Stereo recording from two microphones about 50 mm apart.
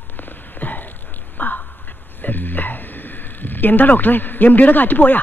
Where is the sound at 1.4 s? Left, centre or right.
Left.